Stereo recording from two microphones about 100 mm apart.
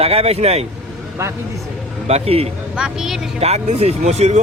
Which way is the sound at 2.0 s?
85° right.